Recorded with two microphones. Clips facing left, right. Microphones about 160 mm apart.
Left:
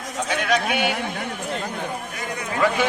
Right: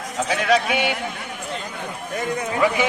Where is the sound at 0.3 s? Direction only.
30° right (ahead or behind).